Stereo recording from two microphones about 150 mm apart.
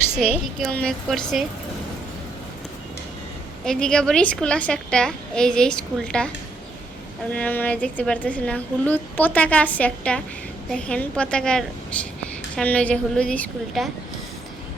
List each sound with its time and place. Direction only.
0.2 s a woman's voice: centre (ahead or behind)
3.6 s a woman's voice: 5° left (ahead or behind)